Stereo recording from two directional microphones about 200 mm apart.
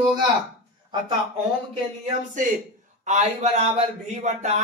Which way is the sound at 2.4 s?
40° right (ahead or behind).